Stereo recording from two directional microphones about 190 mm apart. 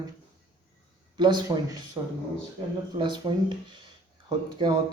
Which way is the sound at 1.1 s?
25° right (ahead or behind).